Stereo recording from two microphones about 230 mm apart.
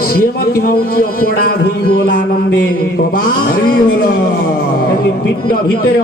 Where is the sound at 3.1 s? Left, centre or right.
Left.